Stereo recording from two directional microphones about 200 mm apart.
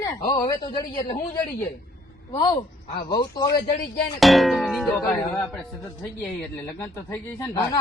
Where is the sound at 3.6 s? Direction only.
45° left (ahead or behind).